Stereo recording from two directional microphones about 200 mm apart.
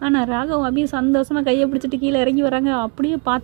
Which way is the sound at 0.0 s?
20° right (ahead or behind).